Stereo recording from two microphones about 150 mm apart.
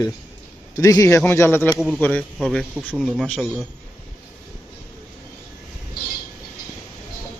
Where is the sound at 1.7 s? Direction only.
5° right (ahead or behind).